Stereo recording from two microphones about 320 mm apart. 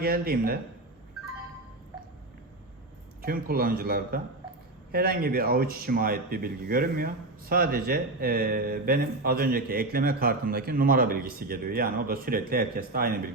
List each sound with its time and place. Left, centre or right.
0.0 s speech: right
3.2 s speech: right